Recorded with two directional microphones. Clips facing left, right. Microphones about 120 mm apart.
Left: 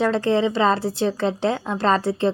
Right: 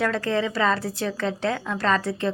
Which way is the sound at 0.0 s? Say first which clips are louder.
Left 5 dB; 30° left (ahead or behind).